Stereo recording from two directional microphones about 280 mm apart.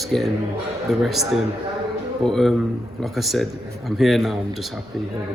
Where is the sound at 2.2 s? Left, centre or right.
Centre.